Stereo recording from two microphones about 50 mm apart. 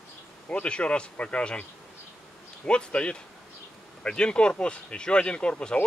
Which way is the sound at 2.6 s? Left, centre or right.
Left.